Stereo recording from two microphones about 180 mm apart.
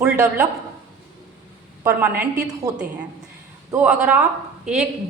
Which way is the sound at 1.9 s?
10° right (ahead or behind).